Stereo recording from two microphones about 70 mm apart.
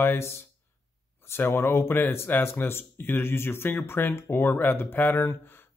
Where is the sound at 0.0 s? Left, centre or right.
Left.